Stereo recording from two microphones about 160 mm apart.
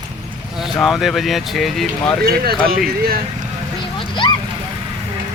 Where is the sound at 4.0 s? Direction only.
30° left (ahead or behind).